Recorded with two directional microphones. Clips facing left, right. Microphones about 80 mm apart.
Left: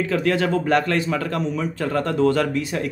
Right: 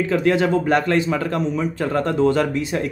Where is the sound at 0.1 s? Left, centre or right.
Centre.